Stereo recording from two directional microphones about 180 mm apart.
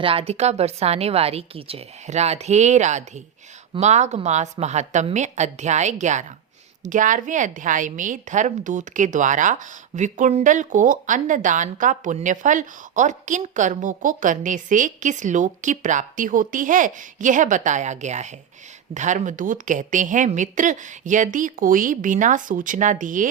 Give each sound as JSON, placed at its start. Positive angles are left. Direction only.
{"t": 0.0, "sound": "a woman's voice", "side_deg": -30}